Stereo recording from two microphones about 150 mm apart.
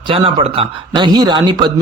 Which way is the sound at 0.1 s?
35° right (ahead or behind).